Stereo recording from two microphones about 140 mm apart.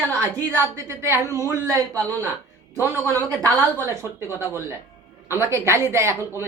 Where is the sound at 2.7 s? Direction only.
20° left (ahead or behind).